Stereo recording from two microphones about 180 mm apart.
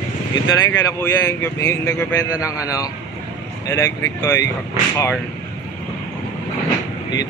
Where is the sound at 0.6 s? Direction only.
15° left (ahead or behind).